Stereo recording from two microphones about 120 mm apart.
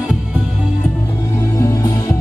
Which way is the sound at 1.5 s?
30° left (ahead or behind).